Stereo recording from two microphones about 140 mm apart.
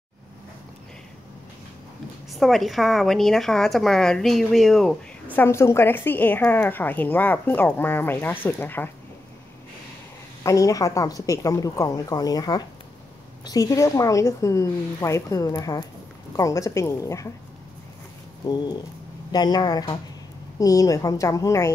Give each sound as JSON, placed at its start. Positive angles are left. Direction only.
{"t": 2.3, "sound": "speech", "side_deg": 0}
{"t": 5.3, "sound": "a woman's voice", "side_deg": 15}
{"t": 10.4, "sound": "a woman's voice", "side_deg": 25}
{"t": 18.4, "sound": "a woman's voice", "side_deg": 30}